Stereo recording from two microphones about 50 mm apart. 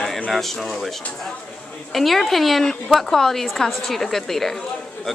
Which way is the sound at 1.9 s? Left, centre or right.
Centre.